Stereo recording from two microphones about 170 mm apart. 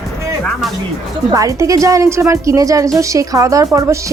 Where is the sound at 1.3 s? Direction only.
20° right (ahead or behind).